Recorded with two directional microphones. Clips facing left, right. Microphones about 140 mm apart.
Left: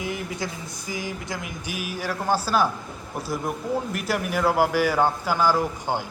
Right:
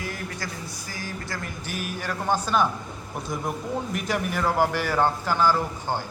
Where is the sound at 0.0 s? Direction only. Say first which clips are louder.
Left 4 dB; 20° left (ahead or behind).